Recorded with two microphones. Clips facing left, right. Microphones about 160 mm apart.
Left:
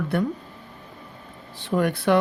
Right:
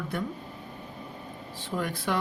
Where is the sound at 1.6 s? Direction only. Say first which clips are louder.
Left 9 dB; 70° left (ahead or behind).